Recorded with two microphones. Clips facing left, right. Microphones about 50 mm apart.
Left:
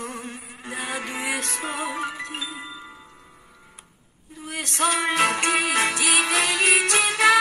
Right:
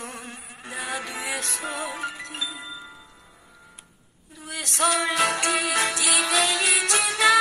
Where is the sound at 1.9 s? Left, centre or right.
Centre.